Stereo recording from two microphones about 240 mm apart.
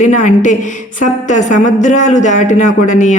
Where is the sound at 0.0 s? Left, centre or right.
Left.